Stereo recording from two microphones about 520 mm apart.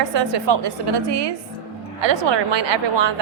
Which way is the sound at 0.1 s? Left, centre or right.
Right.